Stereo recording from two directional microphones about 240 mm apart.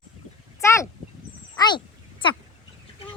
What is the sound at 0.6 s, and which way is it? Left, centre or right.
Speech, centre.